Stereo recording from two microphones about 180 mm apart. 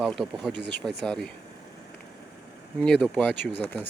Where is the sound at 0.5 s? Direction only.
70° right (ahead or behind).